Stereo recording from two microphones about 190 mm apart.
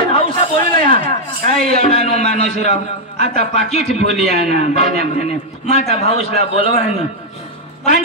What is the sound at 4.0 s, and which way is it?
Speech, 60° right (ahead or behind).